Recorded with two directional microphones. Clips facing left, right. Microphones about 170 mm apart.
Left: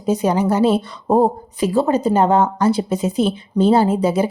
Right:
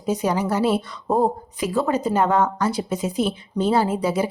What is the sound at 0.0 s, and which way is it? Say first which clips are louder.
A woman's voice: left 5 dB; 25° left (ahead or behind).